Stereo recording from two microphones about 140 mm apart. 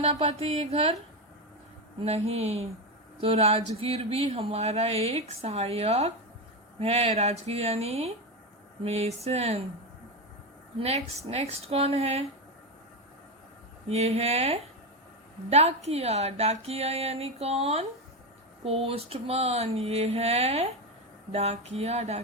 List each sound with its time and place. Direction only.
0.1 s speech: 45° right (ahead or behind)
2.0 s speech: 45° right (ahead or behind)
10.8 s speech: 45° right (ahead or behind)
13.8 s speech: 50° right (ahead or behind)